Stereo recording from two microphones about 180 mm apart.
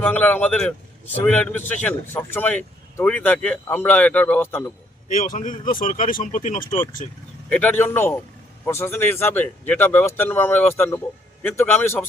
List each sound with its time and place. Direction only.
0.0 s a man's voice: 10° left (ahead or behind)
5.0 s speech: 45° left (ahead or behind)
7.5 s a man's voice: 10° left (ahead or behind)